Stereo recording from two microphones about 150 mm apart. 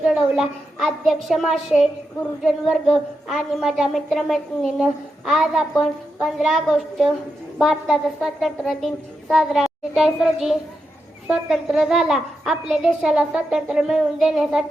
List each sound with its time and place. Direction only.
0.0 s a woman's voice: centre (ahead or behind)